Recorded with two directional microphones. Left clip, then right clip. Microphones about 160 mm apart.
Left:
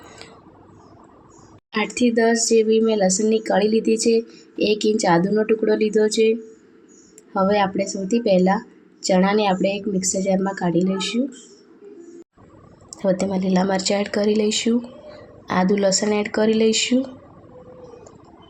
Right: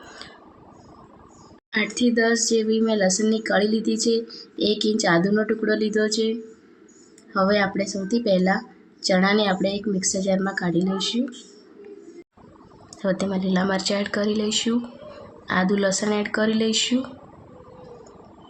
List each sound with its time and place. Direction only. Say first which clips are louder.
2.0 s a woman's voice: left 3 dB; 15° left (ahead or behind)
7.3 s a woman's voice: left 2 dB; 15° left (ahead or behind)
13.0 s a woman's voice: left 4 dB; 20° left (ahead or behind)